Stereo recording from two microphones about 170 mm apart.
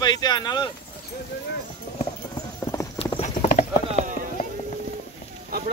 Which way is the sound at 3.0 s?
35° left (ahead or behind).